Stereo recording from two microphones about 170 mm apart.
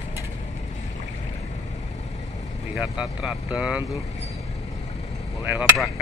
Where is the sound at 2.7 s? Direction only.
5° right (ahead or behind).